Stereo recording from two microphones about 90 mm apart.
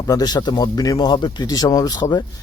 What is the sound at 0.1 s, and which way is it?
Speech, 45° left (ahead or behind).